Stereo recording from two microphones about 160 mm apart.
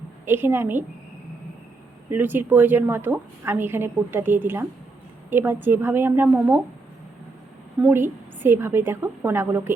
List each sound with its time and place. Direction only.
0.3 s a woman's voice: 15° right (ahead or behind)
2.0 s a woman's voice: 10° right (ahead or behind)
7.8 s a woman's voice: 15° right (ahead or behind)